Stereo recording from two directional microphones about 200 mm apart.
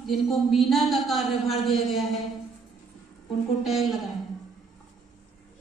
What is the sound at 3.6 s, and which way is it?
Speech, centre (ahead or behind).